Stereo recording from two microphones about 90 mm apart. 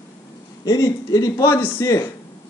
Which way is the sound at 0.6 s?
40° left (ahead or behind).